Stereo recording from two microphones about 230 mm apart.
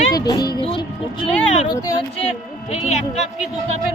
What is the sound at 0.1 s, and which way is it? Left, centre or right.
A child's voice, centre.